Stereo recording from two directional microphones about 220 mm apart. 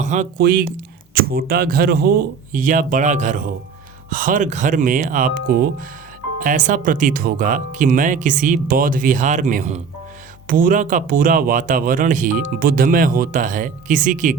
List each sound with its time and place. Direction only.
0.0 s speech: 35° right (ahead or behind)